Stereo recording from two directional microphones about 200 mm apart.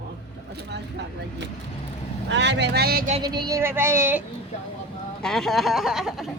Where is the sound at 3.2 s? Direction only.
20° right (ahead or behind).